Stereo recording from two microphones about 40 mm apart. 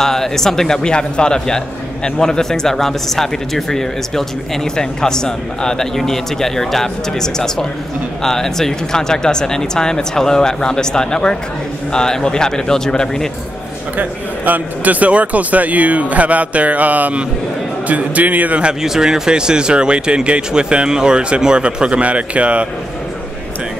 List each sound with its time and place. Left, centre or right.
0.0 s speech: centre
0.8 s speech: left
13.9 s a man's voice: right
18.8 s a man's voice: centre; by 22.7 s right